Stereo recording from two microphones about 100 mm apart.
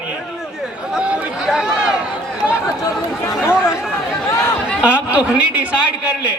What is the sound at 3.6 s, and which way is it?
A man's voice, 5° right (ahead or behind).